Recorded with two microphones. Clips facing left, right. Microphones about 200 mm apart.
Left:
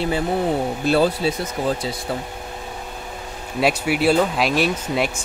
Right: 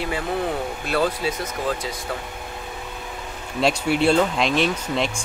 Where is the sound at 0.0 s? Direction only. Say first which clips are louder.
Left 4 dB; 30° left (ahead or behind).